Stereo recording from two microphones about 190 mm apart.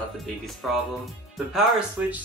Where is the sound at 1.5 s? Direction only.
5° right (ahead or behind).